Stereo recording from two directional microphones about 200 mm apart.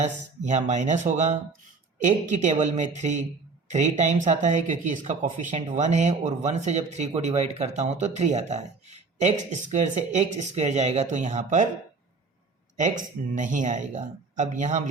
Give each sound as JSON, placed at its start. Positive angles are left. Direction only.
{"t": 0.0, "sound": "speech", "side_deg": -35}
{"t": 13.3, "sound": "speech", "side_deg": -40}